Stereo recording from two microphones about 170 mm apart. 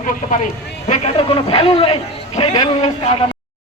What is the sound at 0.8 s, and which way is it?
A man's voice, 35° left (ahead or behind).